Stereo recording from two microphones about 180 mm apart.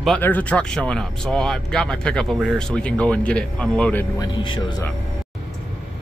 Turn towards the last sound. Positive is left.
turn(degrees=25)  # may be behind; listen again after turning